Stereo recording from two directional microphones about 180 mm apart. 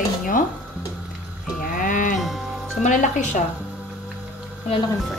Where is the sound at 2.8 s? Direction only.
40° left (ahead or behind).